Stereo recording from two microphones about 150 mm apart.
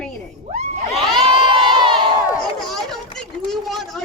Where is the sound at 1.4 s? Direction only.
30° right (ahead or behind).